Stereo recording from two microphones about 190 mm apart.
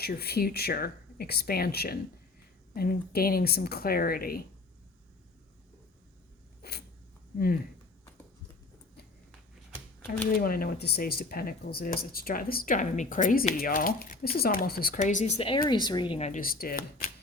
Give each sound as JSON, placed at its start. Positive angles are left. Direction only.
{"t": 0.0, "sound": "speech", "side_deg": 55}
{"t": 6.6, "sound": "a sound", "side_deg": 55}
{"t": 10.4, "sound": "speech", "side_deg": 50}